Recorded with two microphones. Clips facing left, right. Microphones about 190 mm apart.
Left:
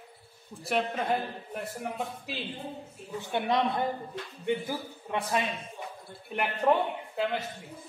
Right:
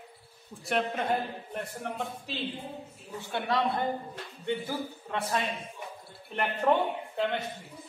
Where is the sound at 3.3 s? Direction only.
20° left (ahead or behind).